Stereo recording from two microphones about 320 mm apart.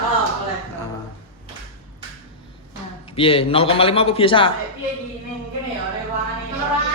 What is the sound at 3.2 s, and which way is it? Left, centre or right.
A man's voice, centre.